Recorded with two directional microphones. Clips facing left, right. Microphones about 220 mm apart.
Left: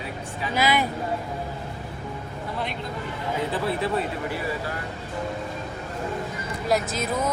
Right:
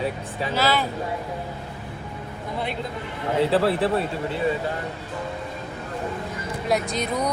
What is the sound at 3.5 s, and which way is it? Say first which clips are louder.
Speech: right 7 dB; 75° right (ahead or behind).